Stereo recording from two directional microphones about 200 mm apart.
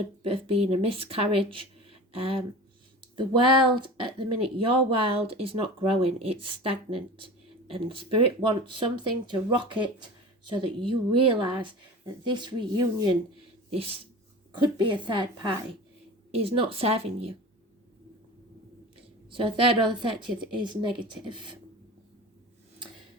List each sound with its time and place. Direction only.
0.2 s speech: 25° right (ahead or behind)
14.5 s speech: 25° right (ahead or behind)
19.3 s speech: 25° right (ahead or behind)